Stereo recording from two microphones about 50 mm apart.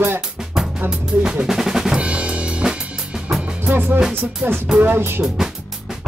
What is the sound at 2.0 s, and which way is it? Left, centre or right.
Drum kit, right.